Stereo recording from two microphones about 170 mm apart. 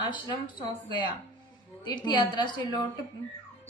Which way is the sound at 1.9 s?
25° left (ahead or behind).